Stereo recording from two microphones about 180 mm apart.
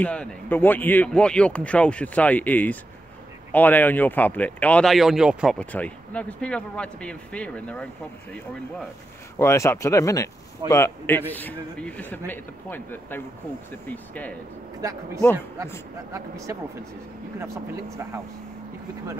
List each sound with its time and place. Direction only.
0.0 s speech: 5° left (ahead or behind)
5.6 s speech: 5° left (ahead or behind)
14.8 s speech: 20° right (ahead or behind)